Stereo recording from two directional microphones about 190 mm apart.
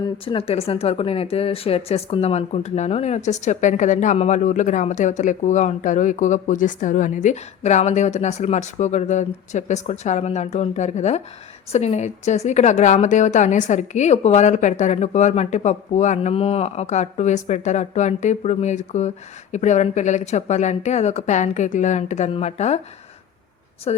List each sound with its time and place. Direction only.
0.3 s a woman's voice: 30° left (ahead or behind)